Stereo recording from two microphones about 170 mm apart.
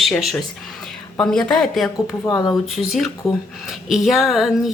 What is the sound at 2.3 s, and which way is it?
Speech, 25° left (ahead or behind).